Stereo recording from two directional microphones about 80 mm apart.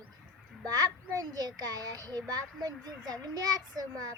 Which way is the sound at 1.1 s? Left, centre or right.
Right.